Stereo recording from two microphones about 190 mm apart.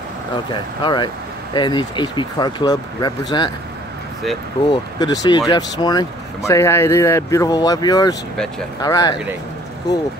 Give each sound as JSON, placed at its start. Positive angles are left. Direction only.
{"t": 0.5, "sound": "speech", "side_deg": 25}
{"t": 4.6, "sound": "speech", "side_deg": 20}